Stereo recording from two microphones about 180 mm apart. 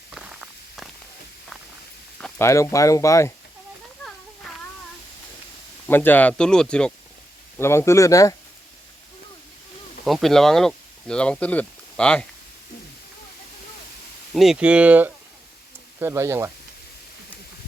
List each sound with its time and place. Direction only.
0.1 s walk: 5° right (ahead or behind)
2.4 s speech: 15° left (ahead or behind)
5.9 s speech: 10° left (ahead or behind)
10.0 s speech: centre (ahead or behind)
14.3 s speech: centre (ahead or behind)